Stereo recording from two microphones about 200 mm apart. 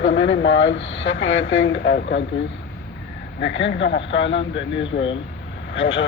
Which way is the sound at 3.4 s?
65° left (ahead or behind).